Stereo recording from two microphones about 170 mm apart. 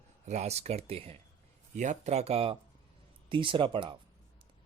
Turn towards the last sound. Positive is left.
turn(degrees=-30)  # may be behind; listen again after turning